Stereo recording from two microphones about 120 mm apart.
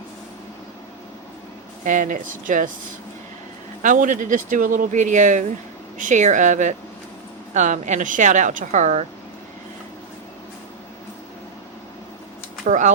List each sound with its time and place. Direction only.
1.8 s speech: 90° right
3.8 s speech: 90° right
12.6 s speech: 90° right